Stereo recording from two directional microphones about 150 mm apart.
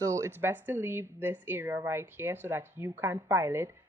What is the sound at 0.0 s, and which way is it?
Speech, 20° right (ahead or behind).